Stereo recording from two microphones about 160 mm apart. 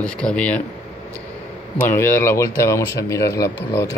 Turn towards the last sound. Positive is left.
turn(degrees=20)  # may be behind; listen again after turning